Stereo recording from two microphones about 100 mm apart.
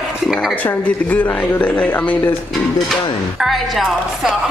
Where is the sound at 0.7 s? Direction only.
15° left (ahead or behind).